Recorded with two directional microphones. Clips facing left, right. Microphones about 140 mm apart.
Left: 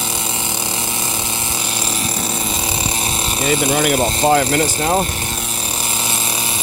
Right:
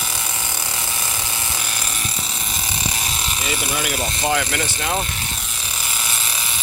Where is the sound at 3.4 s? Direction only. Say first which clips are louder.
Left 10 dB; 45° left (ahead or behind).